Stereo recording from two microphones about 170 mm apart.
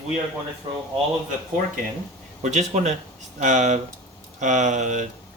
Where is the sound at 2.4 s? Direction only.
45° right (ahead or behind).